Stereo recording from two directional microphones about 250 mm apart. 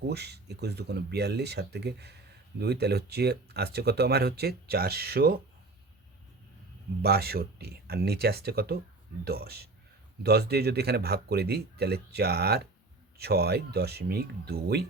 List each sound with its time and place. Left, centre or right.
0.1 s speech: right
7.0 s speech: right